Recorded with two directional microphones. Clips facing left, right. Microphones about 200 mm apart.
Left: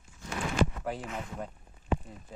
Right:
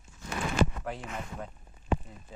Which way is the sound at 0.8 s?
5° left (ahead or behind).